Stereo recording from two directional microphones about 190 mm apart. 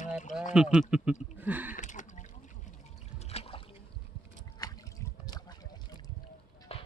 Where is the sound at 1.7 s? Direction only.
40° left (ahead or behind).